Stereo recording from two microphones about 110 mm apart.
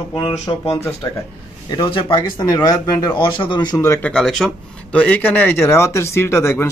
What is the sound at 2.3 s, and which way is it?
Speech, 35° left (ahead or behind).